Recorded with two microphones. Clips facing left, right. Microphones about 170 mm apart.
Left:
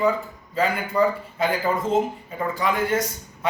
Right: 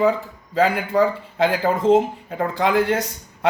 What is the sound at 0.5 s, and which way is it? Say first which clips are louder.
Speech: right 4 dB; 90° right.